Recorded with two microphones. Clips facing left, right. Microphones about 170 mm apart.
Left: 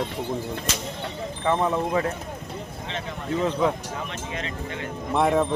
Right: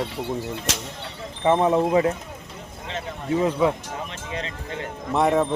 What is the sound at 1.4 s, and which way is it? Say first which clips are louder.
Speech: right 5 dB; 20° right (ahead or behind).